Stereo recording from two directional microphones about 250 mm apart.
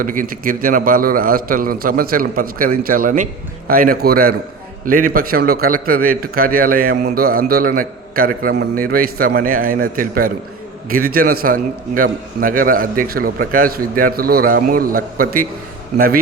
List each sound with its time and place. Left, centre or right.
0.0 s a man's voice: right